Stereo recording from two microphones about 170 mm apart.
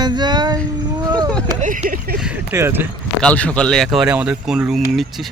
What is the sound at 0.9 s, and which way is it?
Vehicle, 25° right (ahead or behind).